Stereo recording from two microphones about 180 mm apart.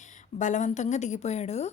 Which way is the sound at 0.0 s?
45° left (ahead or behind).